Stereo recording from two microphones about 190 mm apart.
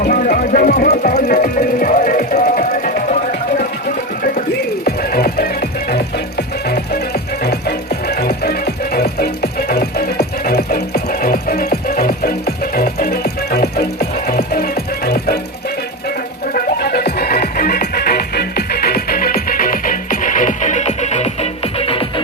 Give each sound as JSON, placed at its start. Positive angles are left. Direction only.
{"t": 0.0, "sound": "speech", "side_deg": 45}
{"t": 1.1, "sound": "music", "side_deg": 45}
{"t": 4.9, "sound": "music", "side_deg": 55}
{"t": 16.6, "sound": "music", "side_deg": 55}